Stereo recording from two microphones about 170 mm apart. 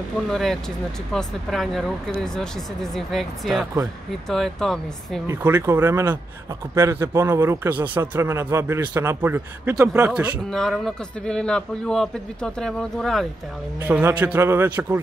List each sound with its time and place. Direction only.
0.3 s a man's voice: centre (ahead or behind)
5.2 s speech: 15° right (ahead or behind)
10.5 s a man's voice: 5° left (ahead or behind)
13.7 s speech: 10° right (ahead or behind)